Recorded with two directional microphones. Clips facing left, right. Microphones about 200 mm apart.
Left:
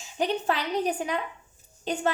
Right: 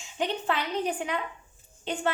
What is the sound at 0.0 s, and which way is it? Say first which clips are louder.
A woman's voice: left 3 dB; 40° left (ahead or behind).